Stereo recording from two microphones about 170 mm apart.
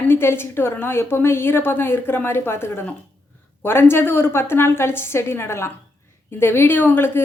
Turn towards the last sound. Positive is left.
turn(degrees=10)  # may be behind; listen again after turning